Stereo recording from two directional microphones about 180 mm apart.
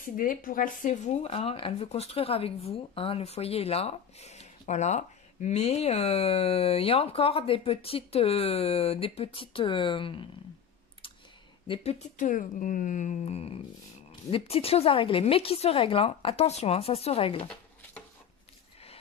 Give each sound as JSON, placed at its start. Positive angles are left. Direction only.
{"t": 0.0, "sound": "speech", "side_deg": 50}
{"t": 11.6, "sound": "speech", "side_deg": 30}